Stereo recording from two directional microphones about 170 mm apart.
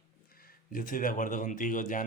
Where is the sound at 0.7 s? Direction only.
55° left (ahead or behind).